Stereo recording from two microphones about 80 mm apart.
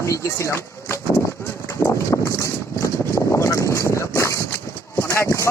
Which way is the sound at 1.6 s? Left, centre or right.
Left.